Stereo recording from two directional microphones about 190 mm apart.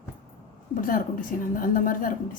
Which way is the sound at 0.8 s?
45° left (ahead or behind).